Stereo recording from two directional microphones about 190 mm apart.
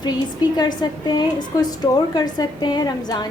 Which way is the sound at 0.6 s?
20° left (ahead or behind).